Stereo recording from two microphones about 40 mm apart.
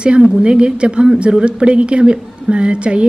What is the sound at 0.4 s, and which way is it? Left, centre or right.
A woman's voice, right.